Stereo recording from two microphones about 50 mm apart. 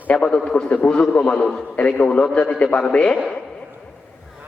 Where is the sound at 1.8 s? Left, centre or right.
Left.